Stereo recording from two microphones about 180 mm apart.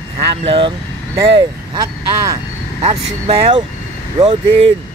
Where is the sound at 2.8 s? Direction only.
30° right (ahead or behind).